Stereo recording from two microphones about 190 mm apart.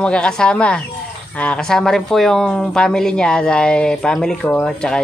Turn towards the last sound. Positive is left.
turn(degrees=5)  # may be behind; listen again after turning